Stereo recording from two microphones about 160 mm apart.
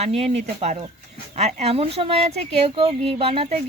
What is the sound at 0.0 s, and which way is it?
A woman's voice, 40° right (ahead or behind).